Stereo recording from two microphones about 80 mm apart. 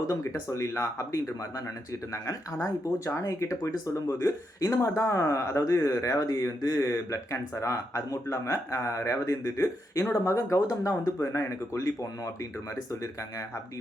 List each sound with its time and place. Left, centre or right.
0.1 s speech: left